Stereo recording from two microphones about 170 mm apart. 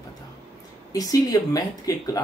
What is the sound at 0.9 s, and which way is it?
Speech, 20° left (ahead or behind).